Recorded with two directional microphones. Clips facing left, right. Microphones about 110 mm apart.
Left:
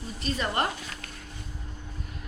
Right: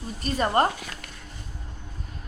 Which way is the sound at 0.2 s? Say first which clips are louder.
Right 6 dB; 40° right (ahead or behind).